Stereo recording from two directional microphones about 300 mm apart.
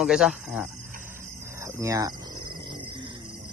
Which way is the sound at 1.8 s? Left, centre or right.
Centre.